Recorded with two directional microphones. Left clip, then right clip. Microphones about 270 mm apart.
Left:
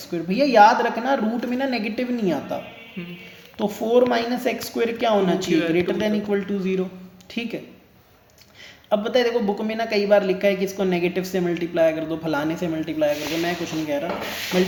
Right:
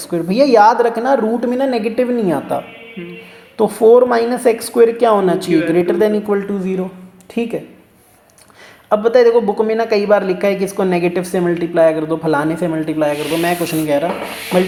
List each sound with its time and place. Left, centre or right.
0.0 s speech: centre
3.6 s speech: centre
8.9 s speech: centre